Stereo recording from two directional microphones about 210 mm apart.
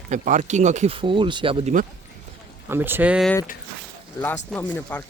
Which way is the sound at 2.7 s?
10° right (ahead or behind).